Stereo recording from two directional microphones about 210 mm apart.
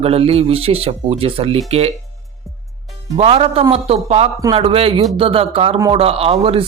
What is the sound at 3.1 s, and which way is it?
Speech, 25° right (ahead or behind).